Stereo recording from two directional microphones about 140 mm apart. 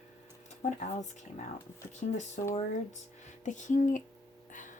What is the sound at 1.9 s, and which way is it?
Speech, 60° left (ahead or behind).